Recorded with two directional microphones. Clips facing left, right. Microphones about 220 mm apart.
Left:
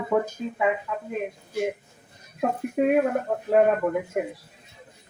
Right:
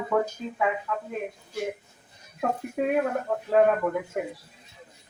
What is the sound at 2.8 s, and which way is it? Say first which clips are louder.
Speech: left 4 dB; 20° left (ahead or behind).